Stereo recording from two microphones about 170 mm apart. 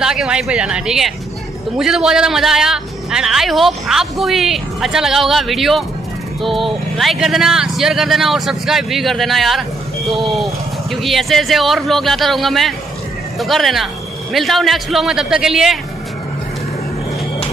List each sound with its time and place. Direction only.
0.0 s a man's voice: 5° right (ahead or behind)